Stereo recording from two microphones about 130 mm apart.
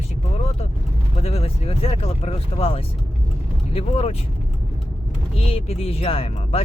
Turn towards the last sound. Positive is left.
turn(degrees=50)  # may be behind; listen again after turning